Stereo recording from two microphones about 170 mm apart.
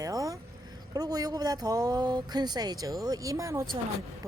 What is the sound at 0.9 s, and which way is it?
A woman's voice, 20° right (ahead or behind).